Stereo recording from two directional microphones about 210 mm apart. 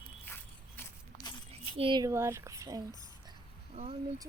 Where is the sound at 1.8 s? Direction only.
20° right (ahead or behind).